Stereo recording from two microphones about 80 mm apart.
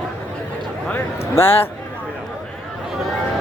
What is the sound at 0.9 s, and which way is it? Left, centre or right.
Speech, left.